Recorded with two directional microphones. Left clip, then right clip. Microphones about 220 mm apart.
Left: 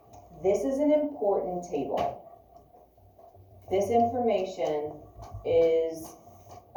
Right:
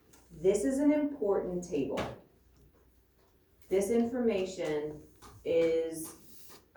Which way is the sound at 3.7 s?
30° right (ahead or behind).